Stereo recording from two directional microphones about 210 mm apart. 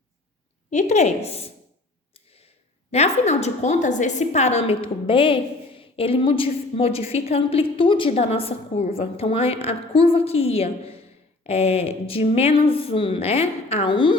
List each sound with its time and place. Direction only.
0.7 s a woman's voice: 35° left (ahead or behind)
2.1 s a sound: 30° left (ahead or behind)
2.9 s a woman's voice: 30° left (ahead or behind)